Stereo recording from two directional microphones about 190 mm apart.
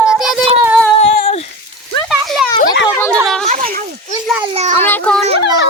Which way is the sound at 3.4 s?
40° right (ahead or behind).